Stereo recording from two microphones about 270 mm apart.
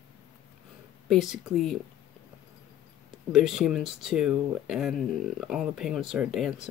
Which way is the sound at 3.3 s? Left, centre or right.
Centre.